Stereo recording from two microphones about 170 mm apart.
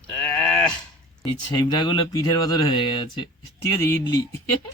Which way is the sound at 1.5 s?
25° left (ahead or behind).